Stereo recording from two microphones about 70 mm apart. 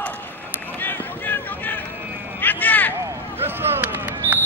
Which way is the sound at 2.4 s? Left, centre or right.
Left.